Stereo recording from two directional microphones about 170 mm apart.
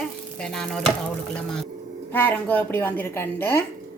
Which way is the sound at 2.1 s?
10° left (ahead or behind).